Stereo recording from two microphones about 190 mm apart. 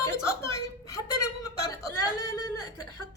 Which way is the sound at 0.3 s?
15° left (ahead or behind).